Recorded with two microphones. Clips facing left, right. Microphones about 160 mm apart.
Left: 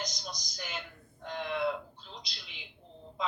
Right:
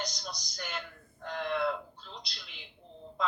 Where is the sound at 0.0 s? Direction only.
35° right (ahead or behind).